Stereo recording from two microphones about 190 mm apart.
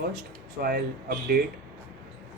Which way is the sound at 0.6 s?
55° right (ahead or behind).